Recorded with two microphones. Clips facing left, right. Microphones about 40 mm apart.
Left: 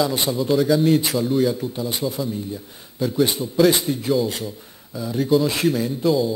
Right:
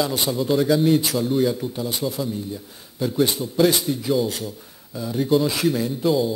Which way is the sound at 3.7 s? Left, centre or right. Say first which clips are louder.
Left 2 dB; centre.